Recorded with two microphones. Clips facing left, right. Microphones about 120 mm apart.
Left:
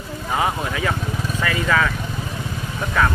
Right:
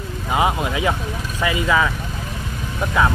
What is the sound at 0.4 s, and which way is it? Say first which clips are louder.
Speech: right 3 dB; 15° right (ahead or behind).